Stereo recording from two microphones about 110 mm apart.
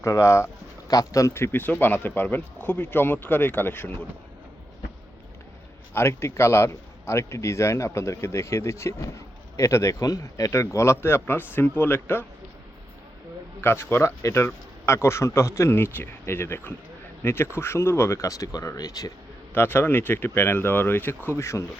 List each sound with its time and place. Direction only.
0.0 s a man's voice: 30° left (ahead or behind)
5.9 s a man's voice: 25° left (ahead or behind)
13.6 s a man's voice: 20° left (ahead or behind)
19.5 s a man's voice: 20° left (ahead or behind)